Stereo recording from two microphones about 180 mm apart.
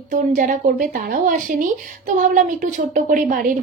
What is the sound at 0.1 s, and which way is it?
Speech, 50° right (ahead or behind).